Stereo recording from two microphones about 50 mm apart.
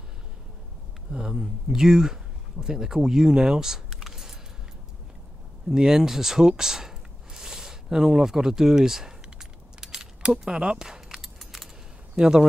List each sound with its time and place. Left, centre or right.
1.1 s speech: centre
5.7 s a sound: centre
10.9 s keys jangling: centre
12.2 s speech: centre